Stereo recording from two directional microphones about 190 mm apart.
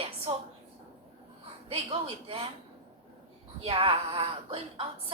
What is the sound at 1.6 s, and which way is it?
Speech, 30° right (ahead or behind).